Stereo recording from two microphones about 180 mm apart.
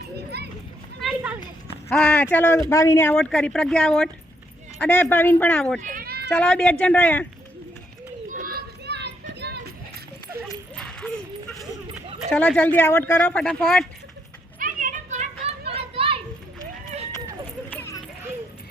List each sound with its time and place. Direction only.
0.3 s children playing: 65° right (ahead or behind)
1.0 s a sound: centre (ahead or behind)
1.9 s speech: 5° left (ahead or behind)
3.2 s speech: 5° left (ahead or behind)
5.8 s children playing: 50° right (ahead or behind)
6.3 s speech: 5° left (ahead or behind)
8.3 s children playing: 50° right (ahead or behind); by 9.1 s 70° right (ahead or behind)
10.8 s a sound: 5° left (ahead or behind)
12.3 s speech: 5° left (ahead or behind)
14.6 s children playing: 45° right (ahead or behind)
17.7 s a sound: 10° left (ahead or behind)